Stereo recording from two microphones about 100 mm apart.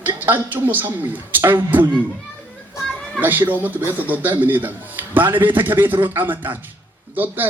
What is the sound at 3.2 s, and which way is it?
A man's voice, 20° right (ahead or behind).